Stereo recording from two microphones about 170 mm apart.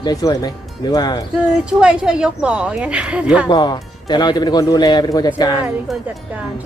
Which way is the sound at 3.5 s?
25° left (ahead or behind).